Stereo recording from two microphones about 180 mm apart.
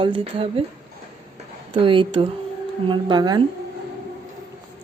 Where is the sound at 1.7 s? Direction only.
30° right (ahead or behind).